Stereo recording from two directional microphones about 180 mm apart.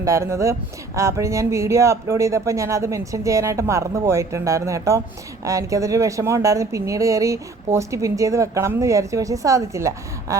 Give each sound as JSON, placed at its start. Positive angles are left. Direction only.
{"t": 0.0, "sound": "speech", "side_deg": -15}